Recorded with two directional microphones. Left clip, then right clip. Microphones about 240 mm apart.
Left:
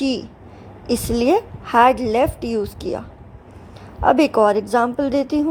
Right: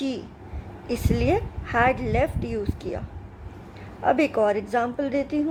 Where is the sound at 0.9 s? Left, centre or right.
Left.